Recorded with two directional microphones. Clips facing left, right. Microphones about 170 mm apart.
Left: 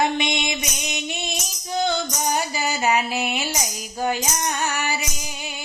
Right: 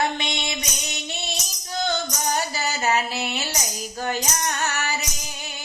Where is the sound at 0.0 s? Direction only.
15° left (ahead or behind).